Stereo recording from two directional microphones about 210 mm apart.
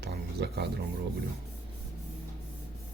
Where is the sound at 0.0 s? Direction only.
50° right (ahead or behind).